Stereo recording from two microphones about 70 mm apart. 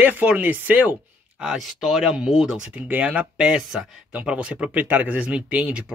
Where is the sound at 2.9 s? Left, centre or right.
Centre.